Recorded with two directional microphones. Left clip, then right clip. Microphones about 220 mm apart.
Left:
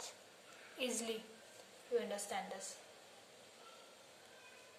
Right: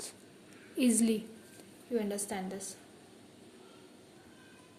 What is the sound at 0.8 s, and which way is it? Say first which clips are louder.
A woman's voice: right 11 dB; 35° right (ahead or behind).